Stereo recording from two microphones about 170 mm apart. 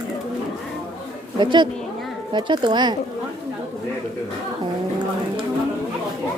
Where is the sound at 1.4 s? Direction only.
25° right (ahead or behind).